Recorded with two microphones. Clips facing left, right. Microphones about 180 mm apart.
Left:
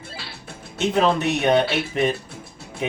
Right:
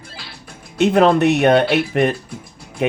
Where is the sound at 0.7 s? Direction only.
65° right (ahead or behind).